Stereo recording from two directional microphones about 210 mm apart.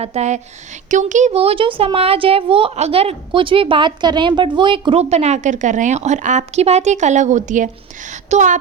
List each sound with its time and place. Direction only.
0.0 s a child's voice: 30° right (ahead or behind)